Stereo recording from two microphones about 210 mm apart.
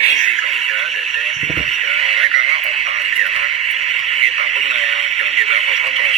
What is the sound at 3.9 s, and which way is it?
Radio, centre (ahead or behind).